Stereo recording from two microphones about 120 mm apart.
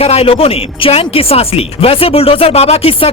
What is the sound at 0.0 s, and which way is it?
Speech, 55° left (ahead or behind).